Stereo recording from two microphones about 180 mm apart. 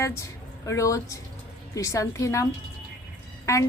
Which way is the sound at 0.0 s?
15° left (ahead or behind).